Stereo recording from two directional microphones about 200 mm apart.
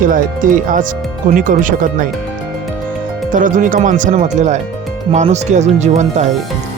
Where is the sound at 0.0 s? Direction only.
40° right (ahead or behind).